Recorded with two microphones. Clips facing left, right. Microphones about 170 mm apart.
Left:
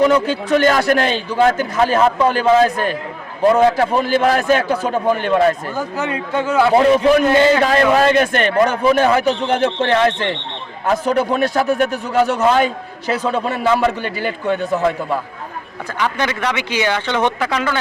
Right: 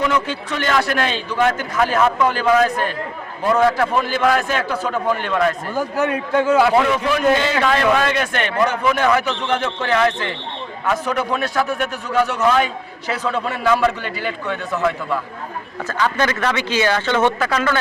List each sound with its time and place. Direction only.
0.0 s a man's voice: 35° left (ahead or behind)
5.7 s a man's voice: 10° right (ahead or behind)
6.7 s a man's voice: 35° left (ahead or behind)
14.2 s a man's voice: 35° left (ahead or behind)
15.9 s speech: 15° left (ahead or behind)